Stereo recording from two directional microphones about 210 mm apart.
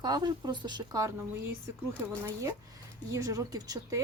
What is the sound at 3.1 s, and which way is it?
Speech, 15° right (ahead or behind).